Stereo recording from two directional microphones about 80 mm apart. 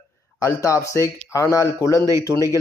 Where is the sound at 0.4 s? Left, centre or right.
Left.